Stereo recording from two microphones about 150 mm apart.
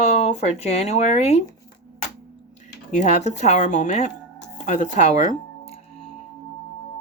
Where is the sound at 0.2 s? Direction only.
45° left (ahead or behind).